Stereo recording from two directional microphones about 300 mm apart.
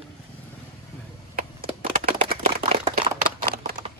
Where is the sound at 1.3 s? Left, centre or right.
Right.